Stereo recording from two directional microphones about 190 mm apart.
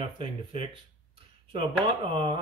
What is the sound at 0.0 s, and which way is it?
Speech, 25° right (ahead or behind).